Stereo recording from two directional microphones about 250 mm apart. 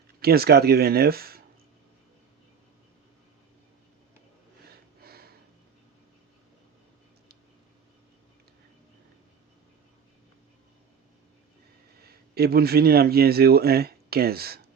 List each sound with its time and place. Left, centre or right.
0.2 s speech: right
5.0 s a sound: right
12.0 s speech: right